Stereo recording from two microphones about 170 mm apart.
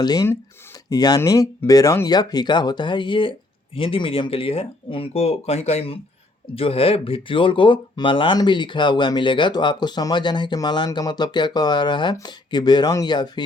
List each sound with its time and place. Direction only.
0.0 s speech: 20° left (ahead or behind)